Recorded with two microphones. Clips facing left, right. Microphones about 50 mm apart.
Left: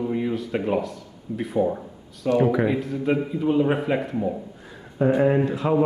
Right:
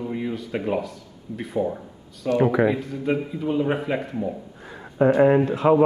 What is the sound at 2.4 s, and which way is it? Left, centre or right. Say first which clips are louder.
Speech: right 2 dB; right.